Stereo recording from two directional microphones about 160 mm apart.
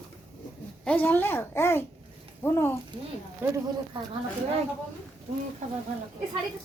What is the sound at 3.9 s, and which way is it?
Speech, 35° right (ahead or behind).